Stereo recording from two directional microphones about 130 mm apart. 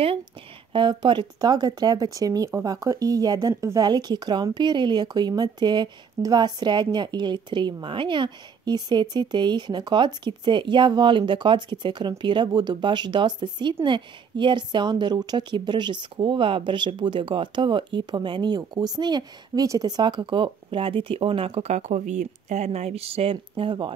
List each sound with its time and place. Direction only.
0.7 s a woman's voice: 35° right (ahead or behind)